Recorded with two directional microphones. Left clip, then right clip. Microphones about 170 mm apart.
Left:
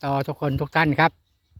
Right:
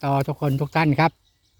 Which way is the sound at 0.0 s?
Centre (ahead or behind).